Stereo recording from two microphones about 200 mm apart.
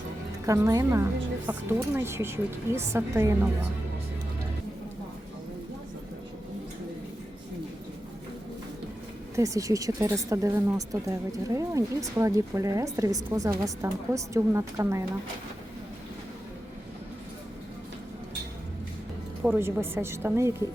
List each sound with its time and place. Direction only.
0.4 s a woman's voice: 15° right (ahead or behind)
9.3 s a woman's voice: 15° right (ahead or behind)
19.4 s a woman's voice: 10° right (ahead or behind)